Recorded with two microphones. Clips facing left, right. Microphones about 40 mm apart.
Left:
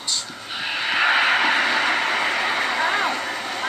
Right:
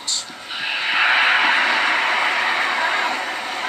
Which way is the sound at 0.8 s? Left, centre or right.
Centre.